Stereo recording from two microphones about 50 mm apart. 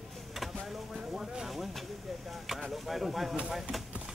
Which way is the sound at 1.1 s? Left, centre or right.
Centre.